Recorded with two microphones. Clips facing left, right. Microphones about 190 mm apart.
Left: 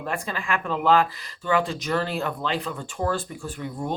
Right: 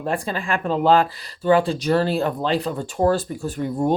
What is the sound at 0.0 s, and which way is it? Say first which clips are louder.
Speech: right 5 dB; 30° right (ahead or behind).